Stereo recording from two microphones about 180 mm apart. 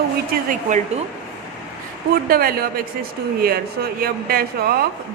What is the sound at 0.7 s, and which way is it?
Speech, 45° right (ahead or behind).